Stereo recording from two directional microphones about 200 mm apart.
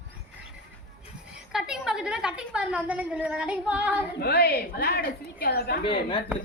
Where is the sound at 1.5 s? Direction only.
5° right (ahead or behind).